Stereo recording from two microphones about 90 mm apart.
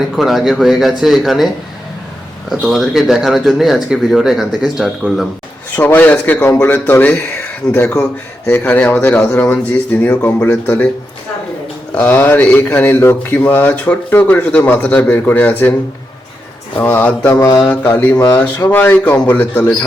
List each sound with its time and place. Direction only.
0.2 s speech: centre (ahead or behind)
2.5 s speech: centre (ahead or behind)
5.7 s speech: 20° left (ahead or behind)
11.9 s speech: 15° left (ahead or behind)
16.7 s speech: 20° left (ahead or behind)